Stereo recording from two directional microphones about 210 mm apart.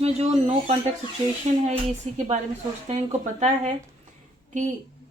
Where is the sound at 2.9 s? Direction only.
30° right (ahead or behind).